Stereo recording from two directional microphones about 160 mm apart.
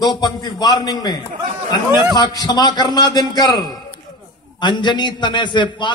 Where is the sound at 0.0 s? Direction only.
25° left (ahead or behind).